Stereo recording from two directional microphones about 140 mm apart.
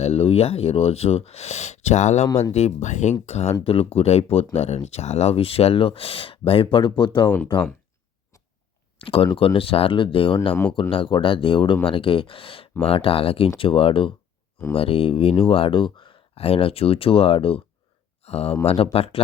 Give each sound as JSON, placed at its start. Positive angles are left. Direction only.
{"t": 0.0, "sound": "speech", "side_deg": 45}
{"t": 9.0, "sound": "speech", "side_deg": 40}
{"t": 10.5, "sound": "speech", "side_deg": 15}
{"t": 10.8, "sound": "speech", "side_deg": 40}
{"t": 18.2, "sound": "a sound", "side_deg": 50}
{"t": 18.6, "sound": "speech", "side_deg": 45}